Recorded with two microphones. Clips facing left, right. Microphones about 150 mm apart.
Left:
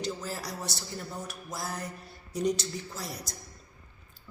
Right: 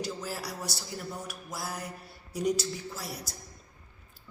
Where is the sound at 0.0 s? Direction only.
10° right (ahead or behind).